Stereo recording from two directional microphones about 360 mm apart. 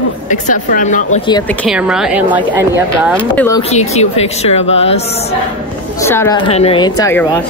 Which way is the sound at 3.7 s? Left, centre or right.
Centre.